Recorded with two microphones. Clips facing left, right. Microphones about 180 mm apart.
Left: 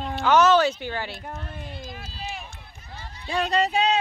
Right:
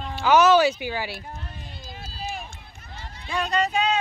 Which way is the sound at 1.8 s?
35° right (ahead or behind).